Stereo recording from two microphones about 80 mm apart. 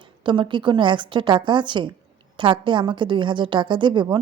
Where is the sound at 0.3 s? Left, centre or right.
Right.